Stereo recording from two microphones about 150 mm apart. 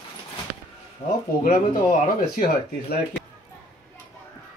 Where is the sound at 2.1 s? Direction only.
70° left (ahead or behind).